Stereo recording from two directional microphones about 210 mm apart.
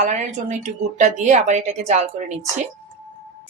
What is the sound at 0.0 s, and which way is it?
A woman's voice, 35° right (ahead or behind).